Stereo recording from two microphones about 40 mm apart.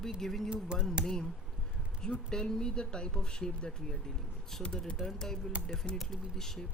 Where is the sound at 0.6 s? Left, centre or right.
Right.